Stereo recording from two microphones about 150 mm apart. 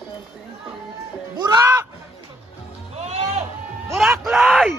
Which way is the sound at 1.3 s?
25° right (ahead or behind).